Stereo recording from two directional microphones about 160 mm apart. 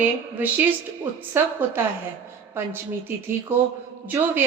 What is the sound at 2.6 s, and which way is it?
A woman's voice, 15° right (ahead or behind).